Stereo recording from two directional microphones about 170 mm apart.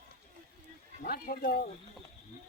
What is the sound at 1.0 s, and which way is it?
Speech, 55° left (ahead or behind).